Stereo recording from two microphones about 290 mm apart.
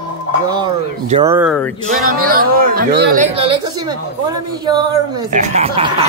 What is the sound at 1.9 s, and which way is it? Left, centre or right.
Speech, right.